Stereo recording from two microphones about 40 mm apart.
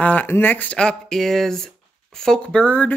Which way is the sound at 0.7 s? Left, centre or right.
Left.